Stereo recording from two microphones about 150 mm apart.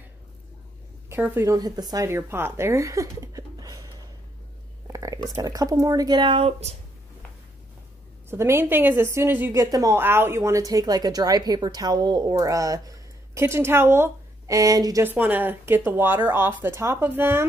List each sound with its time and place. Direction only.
1.0 s speech: 15° right (ahead or behind)
4.8 s a sound: 20° right (ahead or behind)
5.3 s speech: 25° right (ahead or behind)
8.3 s a woman's voice: 15° right (ahead or behind)